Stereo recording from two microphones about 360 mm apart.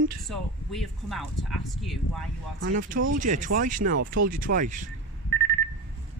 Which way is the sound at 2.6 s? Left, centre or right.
Right.